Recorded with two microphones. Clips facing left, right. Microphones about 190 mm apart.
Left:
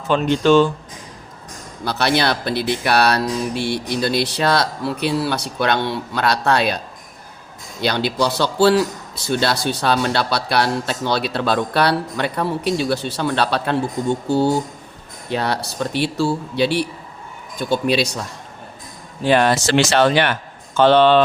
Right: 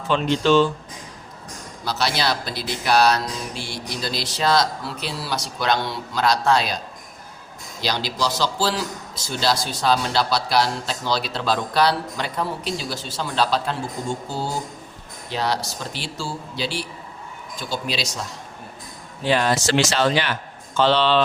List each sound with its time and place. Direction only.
0.1 s speech: 50° left (ahead or behind)
1.8 s a man's voice: 60° left (ahead or behind)
19.2 s a man's voice: 60° left (ahead or behind)